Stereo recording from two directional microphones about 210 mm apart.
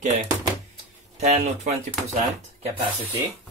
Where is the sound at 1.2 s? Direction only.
35° right (ahead or behind).